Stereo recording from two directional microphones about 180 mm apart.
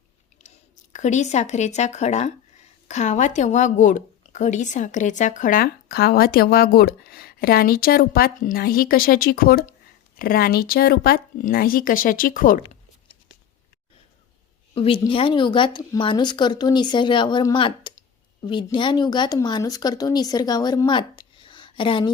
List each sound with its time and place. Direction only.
0.4 s a sound: 40° left (ahead or behind)
0.9 s a woman's voice: 40° left (ahead or behind)
14.8 s speech: 30° left (ahead or behind)